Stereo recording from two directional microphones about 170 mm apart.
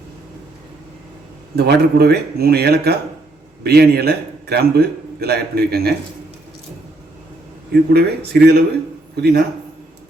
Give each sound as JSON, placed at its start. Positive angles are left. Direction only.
{"t": 1.5, "sound": "a man's voice", "side_deg": -70}
{"t": 7.7, "sound": "a man's voice", "side_deg": -70}